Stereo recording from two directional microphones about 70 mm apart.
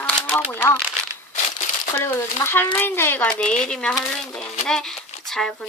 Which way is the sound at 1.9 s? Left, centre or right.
Left.